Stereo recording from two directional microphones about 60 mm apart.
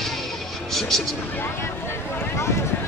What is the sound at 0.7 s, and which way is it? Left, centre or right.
Speech, centre.